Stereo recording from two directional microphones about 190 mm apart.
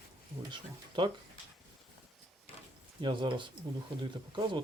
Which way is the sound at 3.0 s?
25° right (ahead or behind).